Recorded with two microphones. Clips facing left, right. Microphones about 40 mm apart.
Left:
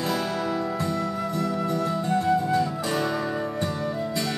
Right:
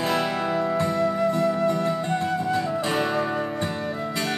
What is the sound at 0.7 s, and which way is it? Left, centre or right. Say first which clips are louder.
Flute: right 5 dB; right.